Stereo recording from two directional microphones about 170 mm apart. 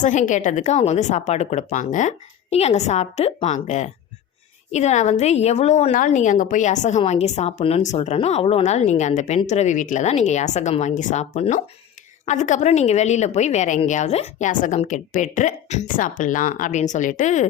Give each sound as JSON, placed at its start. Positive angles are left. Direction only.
{"t": 0.0, "sound": "a woman's voice", "side_deg": 45}